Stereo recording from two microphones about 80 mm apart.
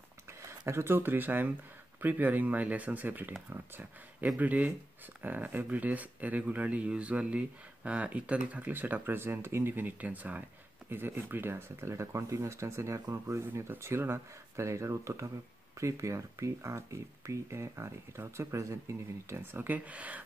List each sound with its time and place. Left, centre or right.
0.3 s speech: right
4.4 s speech: centre